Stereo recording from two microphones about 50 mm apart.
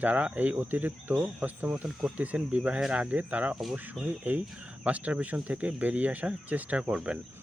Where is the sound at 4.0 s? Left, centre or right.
Centre.